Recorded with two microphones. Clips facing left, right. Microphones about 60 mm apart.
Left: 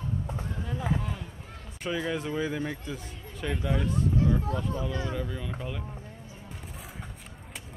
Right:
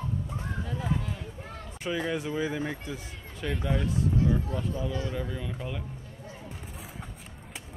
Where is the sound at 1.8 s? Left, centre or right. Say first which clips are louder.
Even; centre.